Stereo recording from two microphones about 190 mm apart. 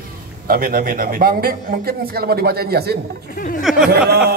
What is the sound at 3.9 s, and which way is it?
Speech, 55° right (ahead or behind).